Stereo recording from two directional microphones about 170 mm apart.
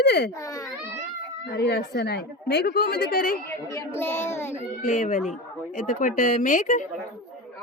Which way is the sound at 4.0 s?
15° left (ahead or behind).